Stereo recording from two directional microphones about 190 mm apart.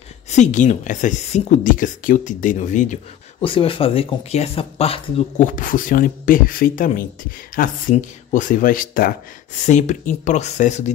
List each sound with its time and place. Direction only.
0.3 s speech: 40° left (ahead or behind)
5.6 s speech: 45° left (ahead or behind)